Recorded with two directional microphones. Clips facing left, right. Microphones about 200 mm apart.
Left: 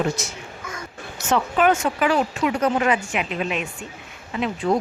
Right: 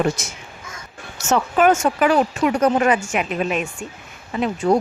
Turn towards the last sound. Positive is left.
turn(degrees=-40)  # may be behind; listen again after turning